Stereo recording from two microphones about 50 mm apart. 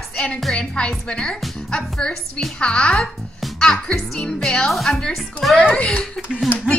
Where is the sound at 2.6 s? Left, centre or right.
Centre.